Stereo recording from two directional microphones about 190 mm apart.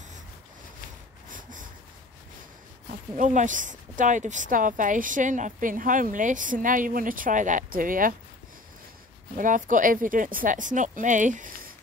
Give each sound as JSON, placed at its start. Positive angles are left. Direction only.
{"t": 1.3, "sound": "a sound", "side_deg": -45}
{"t": 3.2, "sound": "speech", "side_deg": -40}
{"t": 9.4, "sound": "speech", "side_deg": -45}